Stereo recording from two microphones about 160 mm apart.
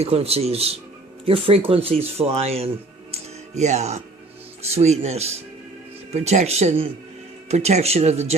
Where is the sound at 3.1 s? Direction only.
40° right (ahead or behind).